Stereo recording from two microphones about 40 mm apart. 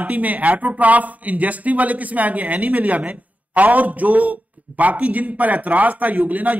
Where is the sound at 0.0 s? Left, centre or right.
Right.